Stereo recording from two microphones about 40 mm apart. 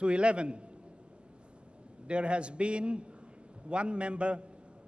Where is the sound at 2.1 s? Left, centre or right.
Right.